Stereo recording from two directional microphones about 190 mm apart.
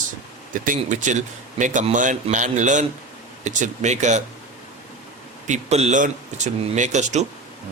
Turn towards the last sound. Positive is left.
turn(degrees=-40)  # may be behind; listen again after turning